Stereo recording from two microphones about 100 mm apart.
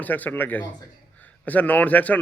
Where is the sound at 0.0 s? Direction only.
15° left (ahead or behind).